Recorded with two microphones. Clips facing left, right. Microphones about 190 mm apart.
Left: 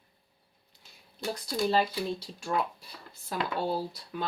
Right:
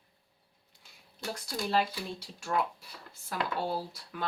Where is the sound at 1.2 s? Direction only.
20° left (ahead or behind).